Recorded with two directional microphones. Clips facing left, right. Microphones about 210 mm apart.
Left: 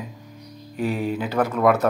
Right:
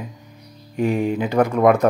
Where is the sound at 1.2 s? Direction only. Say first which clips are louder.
Right 4 dB; 15° right (ahead or behind).